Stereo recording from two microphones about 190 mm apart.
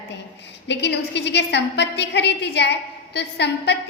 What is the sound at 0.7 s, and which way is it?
A woman's voice, 65° left (ahead or behind).